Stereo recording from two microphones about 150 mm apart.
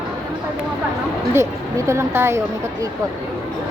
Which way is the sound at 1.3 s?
20° right (ahead or behind).